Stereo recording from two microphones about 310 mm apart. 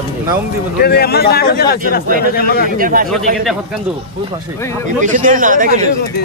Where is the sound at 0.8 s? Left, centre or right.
Left.